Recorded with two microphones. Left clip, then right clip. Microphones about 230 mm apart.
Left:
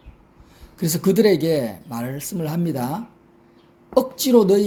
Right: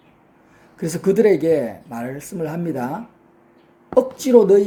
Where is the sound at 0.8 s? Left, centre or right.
Left.